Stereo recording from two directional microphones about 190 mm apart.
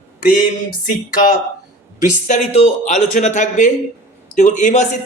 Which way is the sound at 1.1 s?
45° left (ahead or behind).